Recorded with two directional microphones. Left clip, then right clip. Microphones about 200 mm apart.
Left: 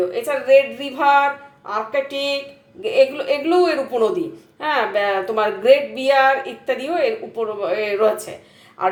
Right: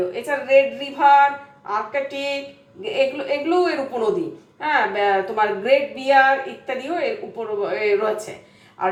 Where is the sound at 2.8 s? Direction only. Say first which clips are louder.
Left 5 dB; 50° left (ahead or behind).